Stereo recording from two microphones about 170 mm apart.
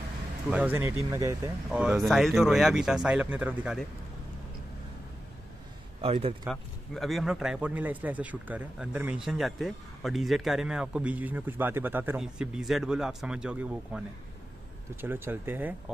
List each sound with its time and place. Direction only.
0.5 s speech: 10° right (ahead or behind)
1.7 s a man's voice: 5° right (ahead or behind)
5.9 s a man's voice: 35° right (ahead or behind)
6.4 s a man's voice: centre (ahead or behind)